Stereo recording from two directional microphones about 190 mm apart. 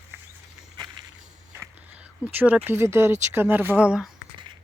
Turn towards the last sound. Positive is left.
turn(degrees=-5)  # may be behind; listen again after turning